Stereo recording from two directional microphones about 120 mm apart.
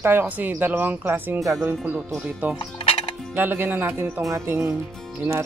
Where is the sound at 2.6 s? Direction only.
50° left (ahead or behind).